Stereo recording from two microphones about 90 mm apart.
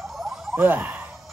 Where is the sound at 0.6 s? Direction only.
20° right (ahead or behind).